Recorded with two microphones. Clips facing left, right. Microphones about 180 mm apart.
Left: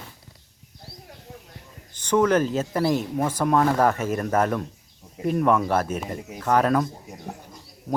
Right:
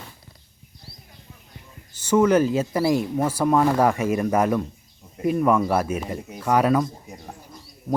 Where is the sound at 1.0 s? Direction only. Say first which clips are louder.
Left 7 dB; 75° left (ahead or behind).